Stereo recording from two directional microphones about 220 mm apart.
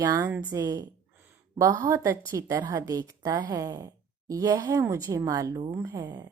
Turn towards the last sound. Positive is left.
turn(degrees=-20)  # may be behind; listen again after turning